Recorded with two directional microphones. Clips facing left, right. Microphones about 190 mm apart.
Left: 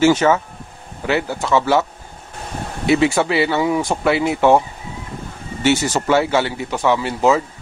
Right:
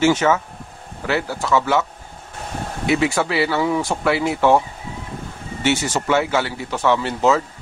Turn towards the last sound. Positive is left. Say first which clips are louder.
# left 2 dB
turn(degrees=15)  # may be behind; listen again after turning